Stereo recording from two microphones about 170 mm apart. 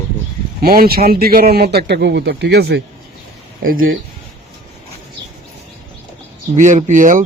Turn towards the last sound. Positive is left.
turn(degrees=-50)  # may be behind; listen again after turning